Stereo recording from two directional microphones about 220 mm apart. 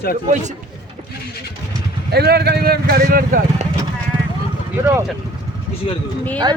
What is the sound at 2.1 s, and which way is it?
Speech, 45° right (ahead or behind).